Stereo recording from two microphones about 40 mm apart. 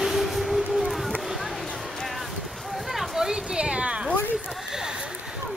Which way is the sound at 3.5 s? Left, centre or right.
Right.